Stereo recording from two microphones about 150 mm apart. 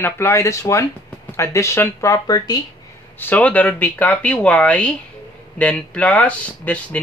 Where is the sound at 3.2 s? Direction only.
10° left (ahead or behind).